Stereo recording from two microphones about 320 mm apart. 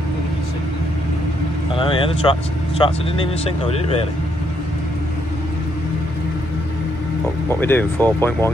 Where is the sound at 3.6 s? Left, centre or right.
Centre.